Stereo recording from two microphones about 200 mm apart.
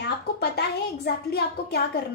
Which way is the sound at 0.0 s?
55° left (ahead or behind).